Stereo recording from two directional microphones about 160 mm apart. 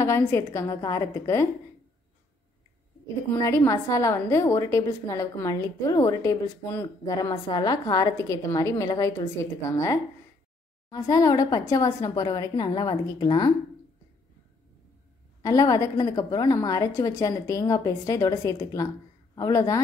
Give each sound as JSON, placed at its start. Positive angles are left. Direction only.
{"t": 0.0, "sound": "a woman's voice", "side_deg": 20}
{"t": 3.3, "sound": "a woman's voice", "side_deg": 20}
{"t": 15.4, "sound": "a woman's voice", "side_deg": 20}